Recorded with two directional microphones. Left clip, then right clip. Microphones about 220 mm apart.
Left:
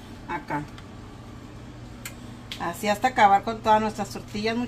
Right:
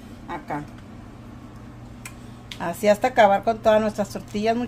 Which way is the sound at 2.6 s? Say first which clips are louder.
Right 5 dB; 55° right (ahead or behind).